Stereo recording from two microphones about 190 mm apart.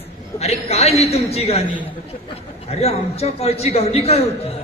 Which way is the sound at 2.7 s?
35° left (ahead or behind).